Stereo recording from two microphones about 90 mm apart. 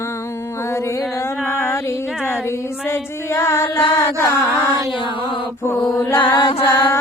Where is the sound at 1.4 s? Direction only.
25° left (ahead or behind).